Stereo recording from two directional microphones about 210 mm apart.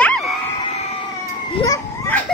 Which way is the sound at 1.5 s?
15° left (ahead or behind).